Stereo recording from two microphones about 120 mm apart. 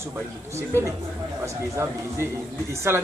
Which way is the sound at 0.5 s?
25° right (ahead or behind).